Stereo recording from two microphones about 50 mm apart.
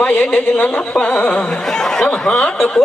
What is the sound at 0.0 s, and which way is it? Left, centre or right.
Speech, left.